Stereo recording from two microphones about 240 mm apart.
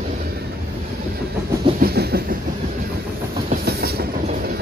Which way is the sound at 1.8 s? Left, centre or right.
Right.